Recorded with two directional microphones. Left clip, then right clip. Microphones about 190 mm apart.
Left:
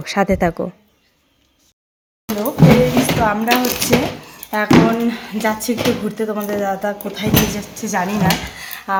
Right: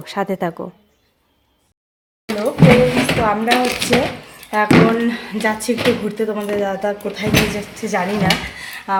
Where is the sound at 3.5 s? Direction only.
35° left (ahead or behind).